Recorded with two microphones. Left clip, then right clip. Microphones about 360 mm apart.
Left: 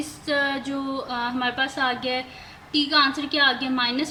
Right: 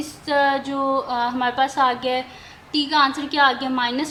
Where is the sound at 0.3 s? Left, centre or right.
Centre.